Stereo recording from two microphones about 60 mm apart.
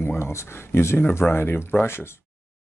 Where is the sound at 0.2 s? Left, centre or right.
Left.